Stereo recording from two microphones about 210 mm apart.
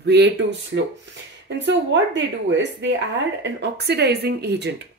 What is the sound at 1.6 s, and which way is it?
Speech, 60° right (ahead or behind).